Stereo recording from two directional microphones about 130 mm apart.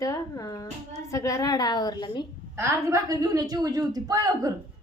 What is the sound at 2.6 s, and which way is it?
A woman's voice, 20° right (ahead or behind).